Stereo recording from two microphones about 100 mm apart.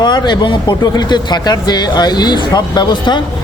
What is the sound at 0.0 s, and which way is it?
Speech, 50° left (ahead or behind).